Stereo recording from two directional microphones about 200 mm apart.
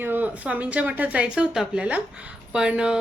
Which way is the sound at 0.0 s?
10° right (ahead or behind).